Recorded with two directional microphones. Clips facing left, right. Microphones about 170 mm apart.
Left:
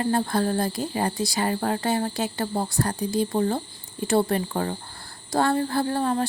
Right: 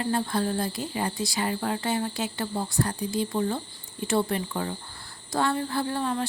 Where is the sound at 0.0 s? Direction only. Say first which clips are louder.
Left 3 dB; 40° left (ahead or behind).